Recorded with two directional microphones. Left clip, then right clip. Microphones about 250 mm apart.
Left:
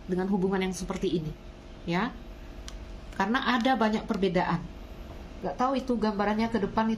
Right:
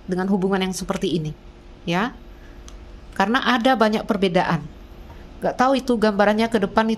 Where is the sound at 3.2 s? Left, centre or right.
Right.